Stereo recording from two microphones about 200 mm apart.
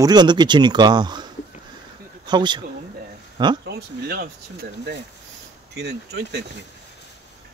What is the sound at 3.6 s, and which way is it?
Speech, 55° right (ahead or behind).